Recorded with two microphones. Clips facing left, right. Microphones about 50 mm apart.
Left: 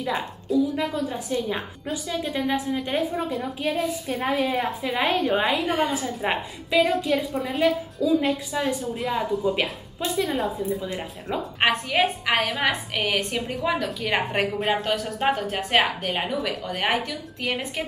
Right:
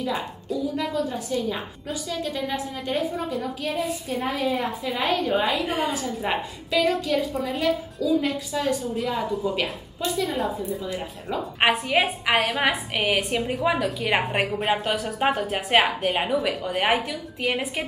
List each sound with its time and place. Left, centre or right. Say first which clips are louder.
0.7 s a woman's voice: even; left
3.3 s a woman's voice: left 1 dB; centre
4.8 s a woman's voice: left 1 dB; centre
5.7 s a woman's voice: left 2 dB; centre
5.9 s a woman's voice: even; centre
10.2 s a woman's voice: left 1 dB; centre
11.6 s a woman's voice: right 1 dB; centre